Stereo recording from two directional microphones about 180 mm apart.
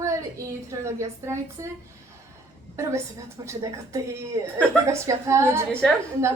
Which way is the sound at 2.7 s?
15° right (ahead or behind).